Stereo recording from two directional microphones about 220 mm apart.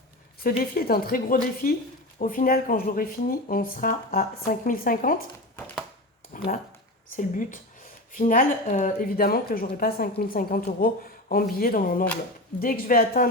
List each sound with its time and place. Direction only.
0.4 s a woman's voice: 45° left (ahead or behind)
5.5 s a sound: 5° left (ahead or behind)
6.3 s a woman's voice: 40° left (ahead or behind)